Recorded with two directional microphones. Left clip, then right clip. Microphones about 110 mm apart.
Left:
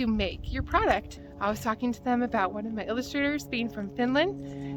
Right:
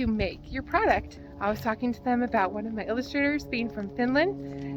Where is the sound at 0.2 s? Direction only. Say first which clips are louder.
Right 1 dB; 30° left (ahead or behind).